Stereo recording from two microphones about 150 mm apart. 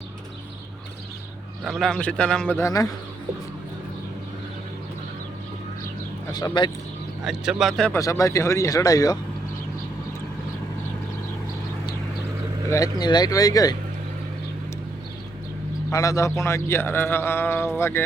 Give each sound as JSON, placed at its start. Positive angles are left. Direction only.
{"t": 1.6, "sound": "a man's voice", "side_deg": 0}
{"t": 2.6, "sound": "speech", "side_deg": 20}
{"t": 6.3, "sound": "speech", "side_deg": 30}
{"t": 7.3, "sound": "a man's voice", "side_deg": 0}
{"t": 7.9, "sound": "speech", "side_deg": 20}
{"t": 12.7, "sound": "speech", "side_deg": 25}
{"t": 15.9, "sound": "speech", "side_deg": 20}